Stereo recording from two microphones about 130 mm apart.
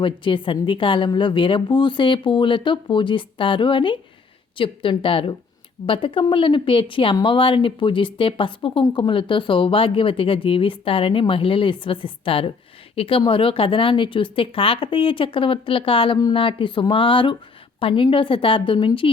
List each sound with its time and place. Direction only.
0.0 s speech: 40° left (ahead or behind)